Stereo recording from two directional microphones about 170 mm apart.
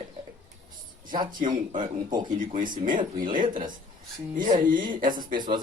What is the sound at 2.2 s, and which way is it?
Speech, 50° right (ahead or behind).